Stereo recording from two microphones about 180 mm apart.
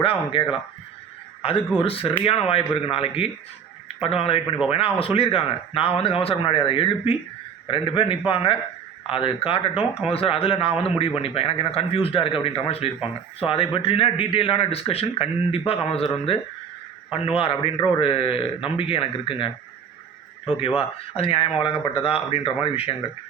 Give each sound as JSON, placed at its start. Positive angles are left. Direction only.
{"t": 0.0, "sound": "a man's voice", "side_deg": 30}
{"t": 17.1, "sound": "a man's voice", "side_deg": 30}
{"t": 20.5, "sound": "a man's voice", "side_deg": 30}